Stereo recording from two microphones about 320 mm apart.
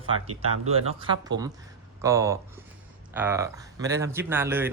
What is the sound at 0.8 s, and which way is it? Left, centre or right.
Speech, centre.